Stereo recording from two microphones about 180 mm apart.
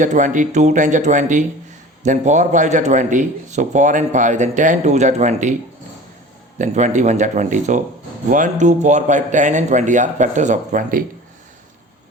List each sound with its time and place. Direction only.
0.0 s speech: 45° right (ahead or behind)
6.6 s speech: 40° right (ahead or behind)